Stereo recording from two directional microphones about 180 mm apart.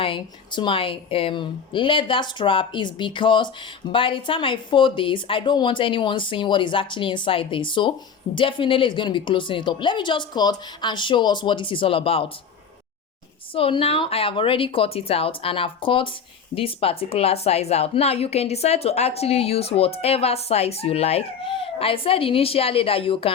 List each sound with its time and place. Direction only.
0.0 s a woman's voice: 30° left (ahead or behind)
13.5 s a woman's voice: 30° left (ahead or behind)